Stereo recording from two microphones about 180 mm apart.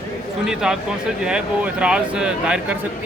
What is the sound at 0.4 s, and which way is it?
Speech, 5° right (ahead or behind).